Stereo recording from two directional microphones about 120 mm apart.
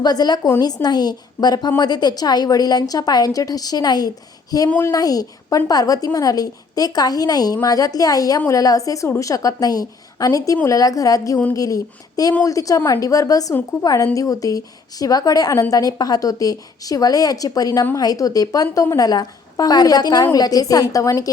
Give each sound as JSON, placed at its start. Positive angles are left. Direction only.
{"t": 0.0, "sound": "a woman's voice", "side_deg": 35}